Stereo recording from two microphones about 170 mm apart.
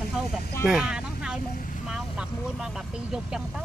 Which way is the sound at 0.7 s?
5° right (ahead or behind).